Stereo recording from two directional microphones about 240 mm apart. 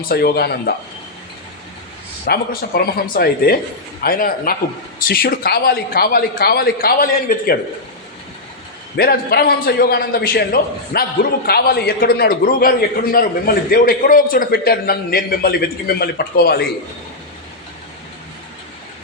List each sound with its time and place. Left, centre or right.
0.1 s a man's voice: left
2.2 s a man's voice: left
9.0 s a man's voice: left